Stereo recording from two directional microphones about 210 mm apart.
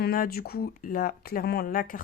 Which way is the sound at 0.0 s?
45° left (ahead or behind).